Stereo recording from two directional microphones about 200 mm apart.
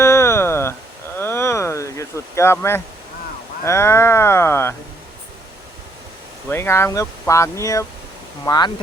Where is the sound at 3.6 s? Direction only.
15° left (ahead or behind).